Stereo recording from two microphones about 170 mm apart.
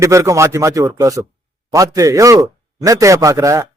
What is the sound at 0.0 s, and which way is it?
A man's voice, 20° right (ahead or behind).